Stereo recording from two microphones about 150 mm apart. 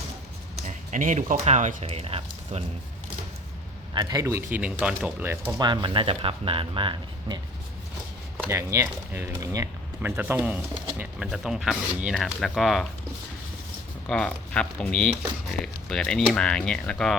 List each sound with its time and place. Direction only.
0.6 s speech: 55° right (ahead or behind); by 2.6 s 40° right (ahead or behind)
3.9 s speech: 25° right (ahead or behind)
4.5 s speech: 10° right (ahead or behind)
5.5 s speech: 30° right (ahead or behind)
8.4 s speech: 20° right (ahead or behind)
10.1 s speech: 10° right (ahead or behind)
14.1 s speech: 5° left (ahead or behind)